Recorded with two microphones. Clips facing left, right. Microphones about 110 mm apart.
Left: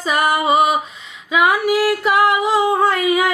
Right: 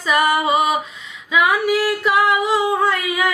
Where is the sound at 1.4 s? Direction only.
35° left (ahead or behind).